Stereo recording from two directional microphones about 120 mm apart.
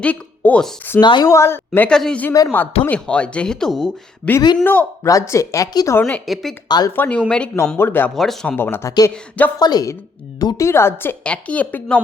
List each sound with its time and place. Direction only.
0.0 s speech: 10° left (ahead or behind)
1.0 s a woman's voice: 40° left (ahead or behind)
1.3 s speech: 20° left (ahead or behind)
1.9 s a woman's voice: 5° left (ahead or behind)
5.0 s speech: 25° left (ahead or behind)
6.0 s a woman's voice: 15° left (ahead or behind)
6.2 s speech: centre (ahead or behind)
6.7 s a woman's voice: 35° left (ahead or behind)
6.9 s a woman's voice: 15° left (ahead or behind)
7.8 s speech: 20° left (ahead or behind)
8.1 s speech: 5° left (ahead or behind)
8.5 s speech: 20° left (ahead or behind)
8.9 s a woman's voice: 30° left (ahead or behind); by 11.9 s 15° left (ahead or behind)